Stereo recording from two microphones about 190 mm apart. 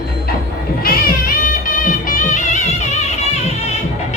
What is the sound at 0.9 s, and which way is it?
Music, 50° left (ahead or behind).